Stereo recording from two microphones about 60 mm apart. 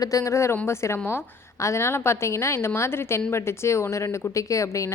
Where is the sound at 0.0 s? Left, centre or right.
Left.